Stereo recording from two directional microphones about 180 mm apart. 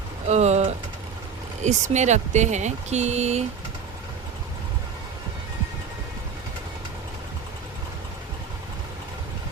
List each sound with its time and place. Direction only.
0.3 s vehicle: 40° right (ahead or behind)
1.6 s speech: 40° right (ahead or behind)